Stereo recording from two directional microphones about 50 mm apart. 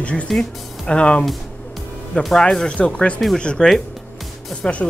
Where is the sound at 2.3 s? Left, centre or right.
Centre.